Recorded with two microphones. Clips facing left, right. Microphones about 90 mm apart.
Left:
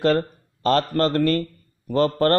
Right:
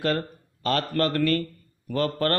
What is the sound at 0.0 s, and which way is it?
A man's voice, 30° left (ahead or behind).